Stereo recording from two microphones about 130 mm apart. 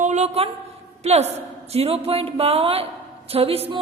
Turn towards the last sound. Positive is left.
turn(degrees=-50)  # may be behind; listen again after turning